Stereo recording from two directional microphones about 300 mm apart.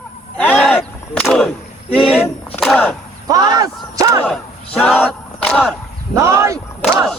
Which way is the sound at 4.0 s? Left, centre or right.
Centre.